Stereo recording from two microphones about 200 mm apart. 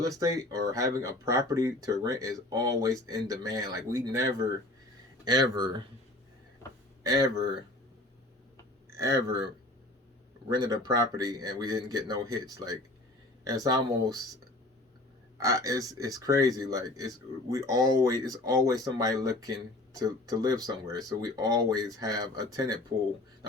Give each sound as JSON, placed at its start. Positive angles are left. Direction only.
{"t": 0.0, "sound": "speech", "side_deg": -20}
{"t": 7.0, "sound": "speech", "side_deg": -20}
{"t": 8.9, "sound": "speech", "side_deg": -15}
{"t": 10.5, "sound": "speech", "side_deg": -20}
{"t": 15.4, "sound": "speech", "side_deg": -15}